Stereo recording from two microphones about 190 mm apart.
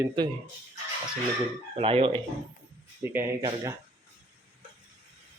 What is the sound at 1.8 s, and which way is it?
Speech, 30° right (ahead or behind).